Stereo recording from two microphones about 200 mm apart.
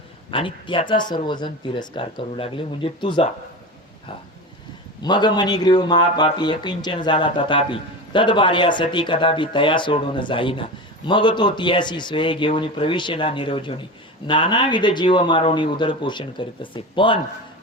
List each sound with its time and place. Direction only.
0.3 s speech: 25° left (ahead or behind)
5.0 s speech: 20° left (ahead or behind)